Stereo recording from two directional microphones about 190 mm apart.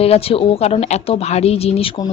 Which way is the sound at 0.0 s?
30° left (ahead or behind).